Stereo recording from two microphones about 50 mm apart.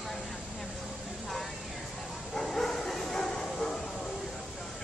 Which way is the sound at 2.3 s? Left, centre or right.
Centre.